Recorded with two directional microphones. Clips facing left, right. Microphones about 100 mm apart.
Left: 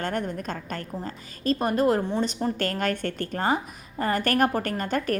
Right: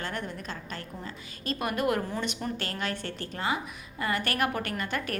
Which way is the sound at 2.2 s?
40° left (ahead or behind).